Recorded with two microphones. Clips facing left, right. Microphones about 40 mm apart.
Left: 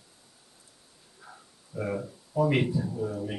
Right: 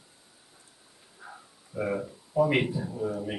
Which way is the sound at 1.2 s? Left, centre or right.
Centre.